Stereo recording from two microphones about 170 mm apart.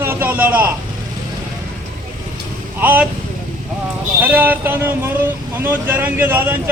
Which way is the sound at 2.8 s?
10° right (ahead or behind).